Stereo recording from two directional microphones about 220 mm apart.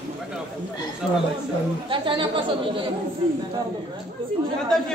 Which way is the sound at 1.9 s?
20° right (ahead or behind).